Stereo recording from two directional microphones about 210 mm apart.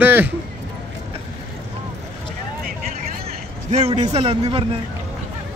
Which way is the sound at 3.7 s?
30° right (ahead or behind).